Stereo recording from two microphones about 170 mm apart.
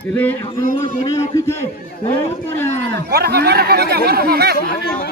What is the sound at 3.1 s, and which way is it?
Speech, 65° right (ahead or behind).